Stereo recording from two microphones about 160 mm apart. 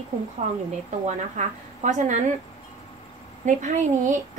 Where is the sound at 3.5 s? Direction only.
50° right (ahead or behind).